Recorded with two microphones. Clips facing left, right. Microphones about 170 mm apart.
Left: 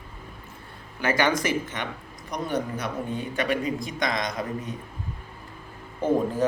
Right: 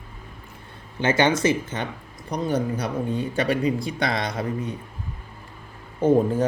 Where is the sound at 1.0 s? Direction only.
25° right (ahead or behind).